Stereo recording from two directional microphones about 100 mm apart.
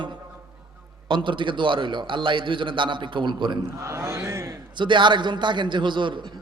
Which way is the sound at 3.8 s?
30° right (ahead or behind).